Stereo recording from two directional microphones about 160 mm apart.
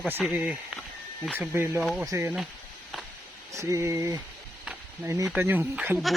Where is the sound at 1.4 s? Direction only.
15° right (ahead or behind).